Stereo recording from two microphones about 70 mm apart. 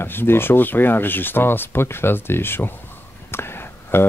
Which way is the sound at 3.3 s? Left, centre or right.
Left.